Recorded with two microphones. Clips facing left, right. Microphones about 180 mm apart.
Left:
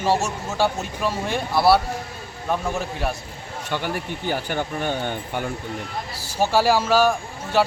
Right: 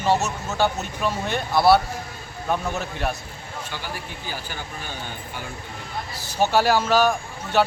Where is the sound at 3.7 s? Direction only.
60° left (ahead or behind).